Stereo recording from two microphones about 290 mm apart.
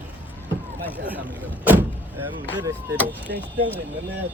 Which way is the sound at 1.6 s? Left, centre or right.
Centre.